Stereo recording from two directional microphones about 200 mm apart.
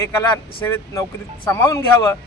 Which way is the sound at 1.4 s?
15° left (ahead or behind).